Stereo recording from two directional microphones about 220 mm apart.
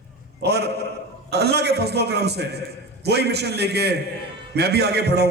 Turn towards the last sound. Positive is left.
turn(degrees=-50)  # may be behind; listen again after turning